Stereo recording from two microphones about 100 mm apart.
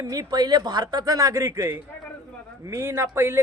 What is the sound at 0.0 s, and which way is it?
A man's voice, 35° right (ahead or behind).